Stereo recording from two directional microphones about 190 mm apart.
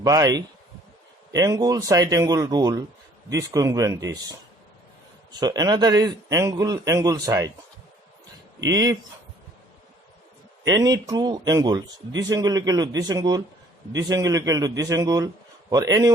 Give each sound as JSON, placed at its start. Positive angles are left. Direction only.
{"t": 0.0, "sound": "a man's voice", "side_deg": -20}
{"t": 5.4, "sound": "a man's voice", "side_deg": -20}
{"t": 8.7, "sound": "a man's voice", "side_deg": -20}
{"t": 10.7, "sound": "a man's voice", "side_deg": -20}